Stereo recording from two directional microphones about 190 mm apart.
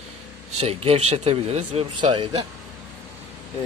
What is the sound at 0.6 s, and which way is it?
Speech, 30° right (ahead or behind).